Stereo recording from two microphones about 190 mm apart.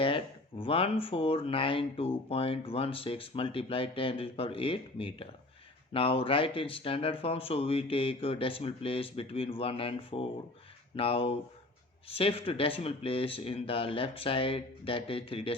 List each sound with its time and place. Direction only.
0.6 s speech: 30° left (ahead or behind)